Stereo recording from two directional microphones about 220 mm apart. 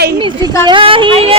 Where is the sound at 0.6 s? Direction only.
25° right (ahead or behind).